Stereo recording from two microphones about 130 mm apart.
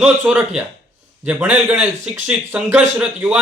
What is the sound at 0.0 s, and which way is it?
Speech, 10° right (ahead or behind).